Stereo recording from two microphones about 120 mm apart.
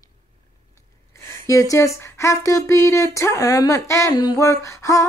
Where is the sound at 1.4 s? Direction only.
30° left (ahead or behind).